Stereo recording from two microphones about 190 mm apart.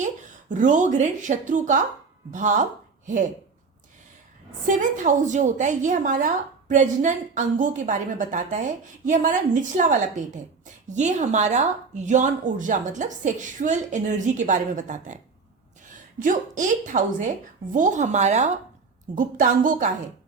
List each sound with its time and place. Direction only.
0.0 s a woman's voice: 40° right (ahead or behind)
4.6 s a woman's voice: 40° right (ahead or behind)
16.2 s a woman's voice: 40° right (ahead or behind)